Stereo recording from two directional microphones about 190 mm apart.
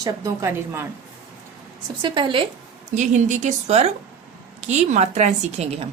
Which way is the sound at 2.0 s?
25° right (ahead or behind).